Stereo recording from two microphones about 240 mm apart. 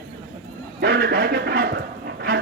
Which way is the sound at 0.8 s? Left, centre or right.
Right.